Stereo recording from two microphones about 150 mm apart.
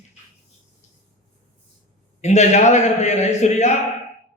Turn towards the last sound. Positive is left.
turn(degrees=50)  # may be behind; listen again after turning